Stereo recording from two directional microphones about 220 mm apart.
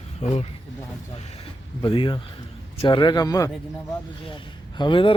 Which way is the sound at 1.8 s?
25° left (ahead or behind).